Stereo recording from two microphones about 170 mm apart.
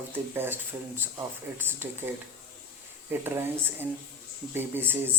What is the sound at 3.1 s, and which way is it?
Speech, 10° right (ahead or behind).